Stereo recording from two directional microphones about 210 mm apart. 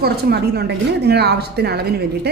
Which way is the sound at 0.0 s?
50° right (ahead or behind).